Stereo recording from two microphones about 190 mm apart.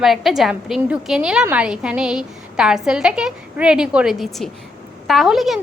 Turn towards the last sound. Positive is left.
turn(degrees=0)  # may be behind; listen again after turning